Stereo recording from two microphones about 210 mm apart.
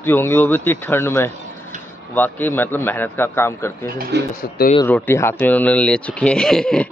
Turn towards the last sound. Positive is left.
turn(degrees=5)  # may be behind; listen again after turning